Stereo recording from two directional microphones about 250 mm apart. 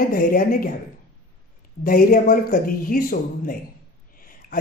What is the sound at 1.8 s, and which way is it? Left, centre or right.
Speech, left.